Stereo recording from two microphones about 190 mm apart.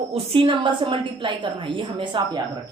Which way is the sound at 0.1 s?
30° right (ahead or behind).